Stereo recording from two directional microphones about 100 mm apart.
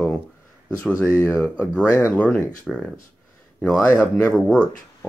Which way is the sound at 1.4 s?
10° left (ahead or behind).